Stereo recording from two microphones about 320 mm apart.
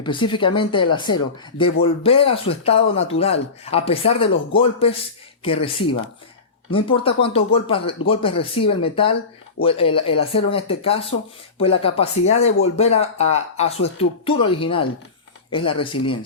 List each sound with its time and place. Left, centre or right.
0.0 s speech: centre